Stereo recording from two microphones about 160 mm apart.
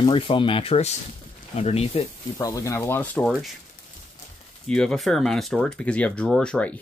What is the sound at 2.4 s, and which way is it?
Speech, 20° left (ahead or behind).